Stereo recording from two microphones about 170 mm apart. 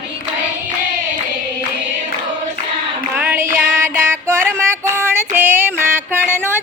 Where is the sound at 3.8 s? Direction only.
15° right (ahead or behind).